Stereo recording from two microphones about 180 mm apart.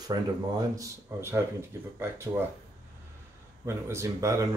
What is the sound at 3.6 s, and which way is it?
Speech, 15° right (ahead or behind).